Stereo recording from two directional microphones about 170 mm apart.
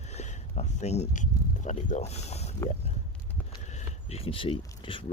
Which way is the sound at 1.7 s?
45° left (ahead or behind).